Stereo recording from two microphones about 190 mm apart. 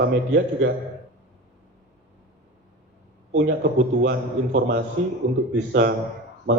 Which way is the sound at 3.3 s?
65° right (ahead or behind).